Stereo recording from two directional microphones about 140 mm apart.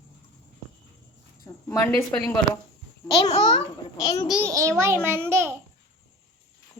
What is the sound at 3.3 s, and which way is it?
Speech, 50° left (ahead or behind).